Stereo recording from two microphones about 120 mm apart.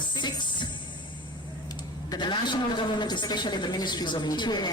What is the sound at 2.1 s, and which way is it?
Music, 40° left (ahead or behind).